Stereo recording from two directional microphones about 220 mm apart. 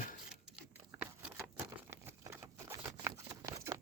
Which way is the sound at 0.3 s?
5° right (ahead or behind).